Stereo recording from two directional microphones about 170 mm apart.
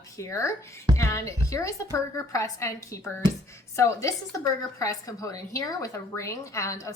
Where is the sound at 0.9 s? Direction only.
15° left (ahead or behind).